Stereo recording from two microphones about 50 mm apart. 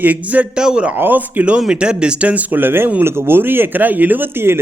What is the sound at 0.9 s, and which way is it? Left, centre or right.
Speech, right.